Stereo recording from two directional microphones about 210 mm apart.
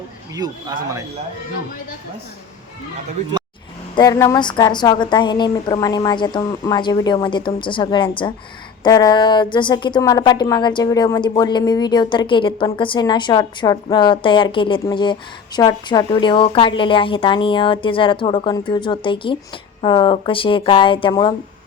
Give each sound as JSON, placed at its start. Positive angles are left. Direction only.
{"t": 0.4, "sound": "speech", "side_deg": -20}
{"t": 3.9, "sound": "speech", "side_deg": 15}